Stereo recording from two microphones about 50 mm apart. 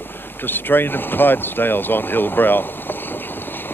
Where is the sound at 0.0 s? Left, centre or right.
Left.